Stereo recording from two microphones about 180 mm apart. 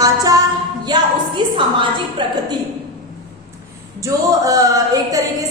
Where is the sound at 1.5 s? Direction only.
25° right (ahead or behind).